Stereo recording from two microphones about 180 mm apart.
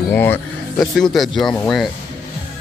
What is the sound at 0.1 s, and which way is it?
Speech, 10° left (ahead or behind).